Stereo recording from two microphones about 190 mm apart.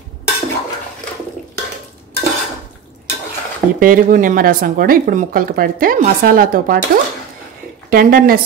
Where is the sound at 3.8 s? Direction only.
45° right (ahead or behind).